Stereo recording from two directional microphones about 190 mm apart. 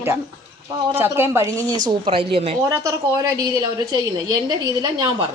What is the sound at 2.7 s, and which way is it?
A woman's voice, 15° right (ahead or behind).